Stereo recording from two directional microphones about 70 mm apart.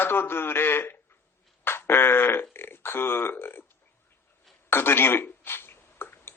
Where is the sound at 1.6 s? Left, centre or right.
Left.